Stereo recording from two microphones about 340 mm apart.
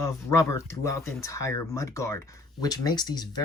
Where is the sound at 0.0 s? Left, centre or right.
Centre.